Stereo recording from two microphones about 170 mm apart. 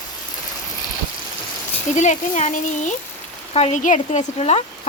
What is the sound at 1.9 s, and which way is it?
Speech, 45° left (ahead or behind).